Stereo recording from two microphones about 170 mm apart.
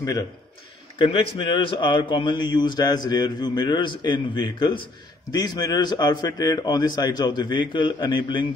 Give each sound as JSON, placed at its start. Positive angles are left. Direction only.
{"t": 0.9, "sound": "a man's voice", "side_deg": 30}